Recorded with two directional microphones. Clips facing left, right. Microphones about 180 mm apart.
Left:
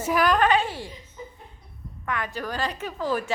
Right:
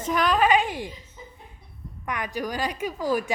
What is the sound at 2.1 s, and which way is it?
A woman's voice, 15° right (ahead or behind).